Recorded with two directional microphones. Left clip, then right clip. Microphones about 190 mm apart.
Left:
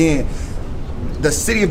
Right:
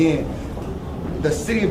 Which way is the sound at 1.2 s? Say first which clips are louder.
Left 5 dB; 35° left (ahead or behind).